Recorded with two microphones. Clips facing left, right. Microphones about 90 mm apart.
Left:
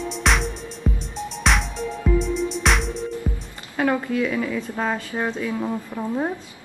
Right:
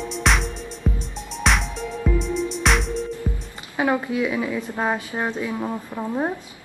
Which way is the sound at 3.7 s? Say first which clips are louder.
Even; 10° right (ahead or behind).